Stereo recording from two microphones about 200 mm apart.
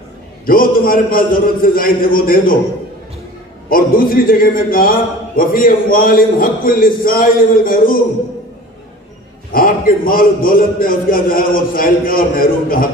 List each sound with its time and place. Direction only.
0.5 s a man's voice: 45° left (ahead or behind)
3.6 s a man's voice: 45° left (ahead or behind)
9.5 s a man's voice: 45° left (ahead or behind)